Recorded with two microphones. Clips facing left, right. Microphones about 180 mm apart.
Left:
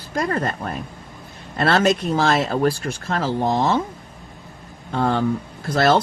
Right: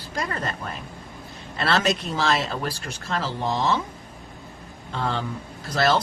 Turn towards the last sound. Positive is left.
turn(degrees=50)  # may be behind; listen again after turning